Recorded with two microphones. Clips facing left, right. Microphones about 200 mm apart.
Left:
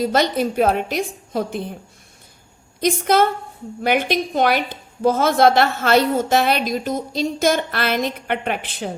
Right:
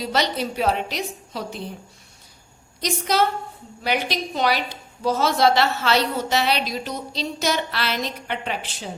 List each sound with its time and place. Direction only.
0.0 s a woman's voice: 50° left (ahead or behind)
2.8 s a woman's voice: 55° left (ahead or behind)